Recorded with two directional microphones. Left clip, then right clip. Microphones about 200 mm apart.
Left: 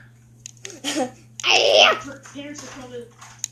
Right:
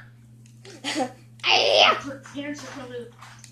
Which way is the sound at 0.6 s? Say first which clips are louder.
Left 2 dB; 35° left (ahead or behind).